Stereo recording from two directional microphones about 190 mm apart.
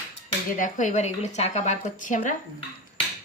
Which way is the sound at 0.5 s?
40° left (ahead or behind).